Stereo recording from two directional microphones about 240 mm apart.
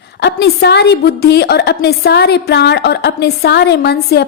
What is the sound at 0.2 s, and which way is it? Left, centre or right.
A woman's voice, left.